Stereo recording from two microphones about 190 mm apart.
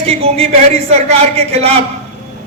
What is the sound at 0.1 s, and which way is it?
A man's voice, 35° right (ahead or behind).